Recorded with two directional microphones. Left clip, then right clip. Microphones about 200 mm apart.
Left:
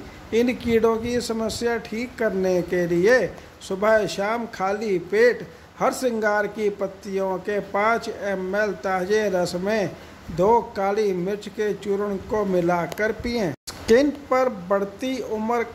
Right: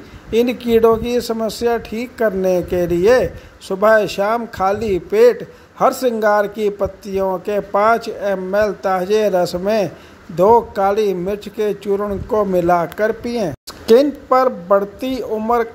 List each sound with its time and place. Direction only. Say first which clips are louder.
0.3 s speech: right 6 dB; 20° right (ahead or behind)